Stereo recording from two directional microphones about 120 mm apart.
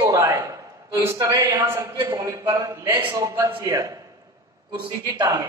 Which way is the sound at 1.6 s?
20° right (ahead or behind).